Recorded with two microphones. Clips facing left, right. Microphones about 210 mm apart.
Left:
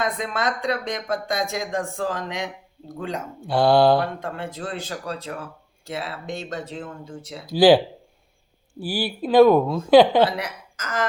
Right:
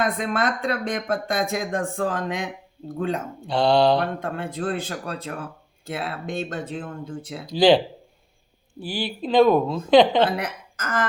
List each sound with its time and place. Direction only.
0.0 s speech: 55° right (ahead or behind)
3.4 s mantra: 5° left (ahead or behind)
4.0 s speech: 55° right (ahead or behind)
7.4 s mantra: 5° left (ahead or behind)
8.8 s speech: 5° left (ahead or behind)
10.2 s a woman's voice: 55° right (ahead or behind)